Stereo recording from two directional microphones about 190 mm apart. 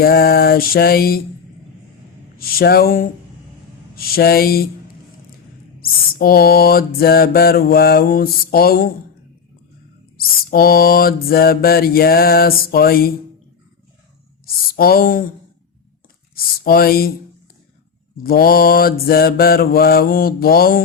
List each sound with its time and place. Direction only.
0.0 s mantra: 55° left (ahead or behind)
2.4 s mantra: 50° left (ahead or behind)
5.8 s mantra: 50° left (ahead or behind)
10.2 s mantra: 50° left (ahead or behind)
14.4 s a sound: 50° left (ahead or behind)
16.3 s a sound: 50° left (ahead or behind)
18.2 s mantra: 50° left (ahead or behind)